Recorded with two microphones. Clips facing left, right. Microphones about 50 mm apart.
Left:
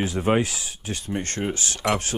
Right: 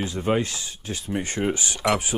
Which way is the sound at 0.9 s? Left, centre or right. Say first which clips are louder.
Right 1 dB; centre.